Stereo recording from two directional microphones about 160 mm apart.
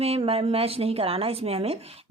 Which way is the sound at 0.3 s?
35° right (ahead or behind).